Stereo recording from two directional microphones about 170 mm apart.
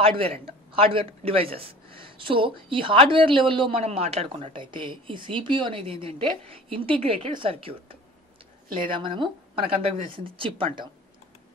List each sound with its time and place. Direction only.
0.0 s speech: 35° right (ahead or behind)